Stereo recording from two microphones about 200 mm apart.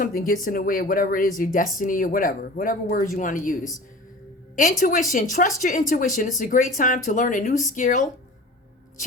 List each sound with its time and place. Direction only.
0.0 s speech: 45° left (ahead or behind)
5.1 s speech: 40° left (ahead or behind)